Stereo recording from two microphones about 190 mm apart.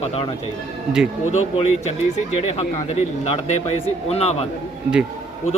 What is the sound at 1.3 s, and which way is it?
A man's voice, 35° left (ahead or behind).